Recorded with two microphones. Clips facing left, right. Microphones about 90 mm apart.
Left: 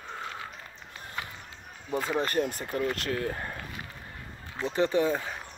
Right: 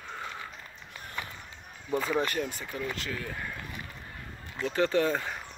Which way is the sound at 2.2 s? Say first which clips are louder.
Left 3 dB; 50° left (ahead or behind).